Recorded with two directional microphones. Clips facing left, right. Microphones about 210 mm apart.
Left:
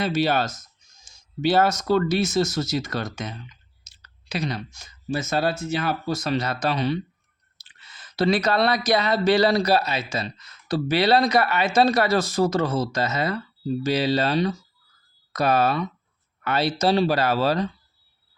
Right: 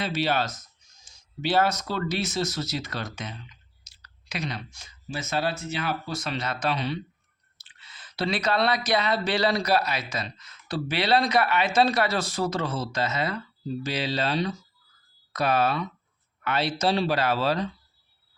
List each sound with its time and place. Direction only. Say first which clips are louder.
0.0 s speech: left 4 dB; 45° left (ahead or behind)
3.8 s speech: left 5 dB; 25° left (ahead or behind); by 17.7 s 40° left (ahead or behind)